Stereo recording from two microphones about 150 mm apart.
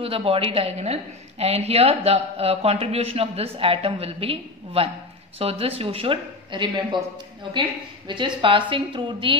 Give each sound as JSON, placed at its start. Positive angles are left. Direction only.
{"t": 0.0, "sound": "speech", "side_deg": -40}
{"t": 8.1, "sound": "speech", "side_deg": -35}